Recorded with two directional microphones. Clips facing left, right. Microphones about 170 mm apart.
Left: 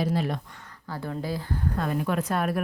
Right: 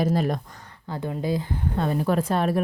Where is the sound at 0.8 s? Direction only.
20° right (ahead or behind).